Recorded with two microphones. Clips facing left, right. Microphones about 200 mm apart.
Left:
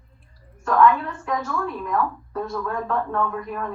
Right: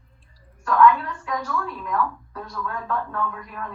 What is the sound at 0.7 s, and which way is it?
A woman's voice, 40° left (ahead or behind).